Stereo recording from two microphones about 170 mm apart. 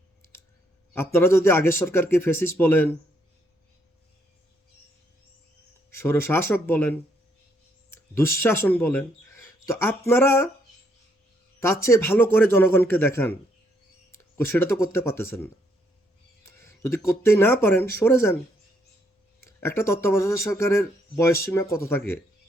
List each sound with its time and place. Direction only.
0.9 s speech: 15° left (ahead or behind)
5.9 s speech: 15° left (ahead or behind)
8.1 s speech: 15° left (ahead or behind)
11.6 s speech: 15° left (ahead or behind)
19.5 s speech: 15° left (ahead or behind)